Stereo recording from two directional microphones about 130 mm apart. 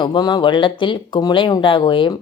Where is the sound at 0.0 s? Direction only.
35° left (ahead or behind).